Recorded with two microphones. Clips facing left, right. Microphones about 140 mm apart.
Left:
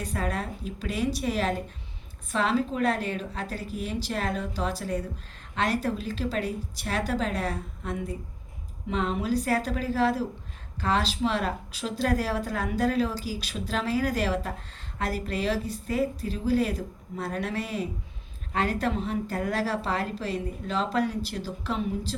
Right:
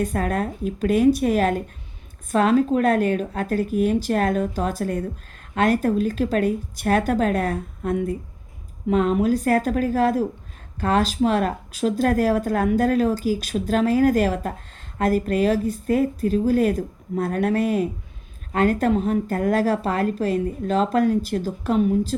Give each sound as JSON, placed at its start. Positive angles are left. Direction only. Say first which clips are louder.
{"t": 0.0, "sound": "speech", "louder": "right 8 dB", "side_deg": -50}